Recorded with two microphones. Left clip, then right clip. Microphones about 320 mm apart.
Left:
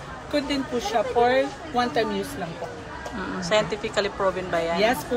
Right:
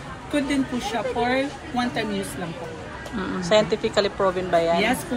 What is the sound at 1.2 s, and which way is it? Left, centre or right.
Speech, left.